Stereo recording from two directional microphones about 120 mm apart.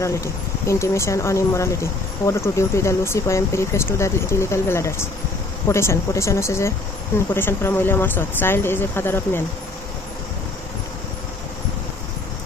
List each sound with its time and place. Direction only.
0.0 s speech: 25° left (ahead or behind)